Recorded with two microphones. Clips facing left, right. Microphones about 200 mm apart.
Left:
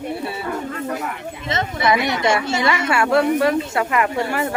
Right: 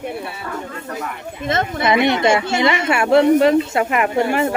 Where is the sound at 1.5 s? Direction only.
50° right (ahead or behind).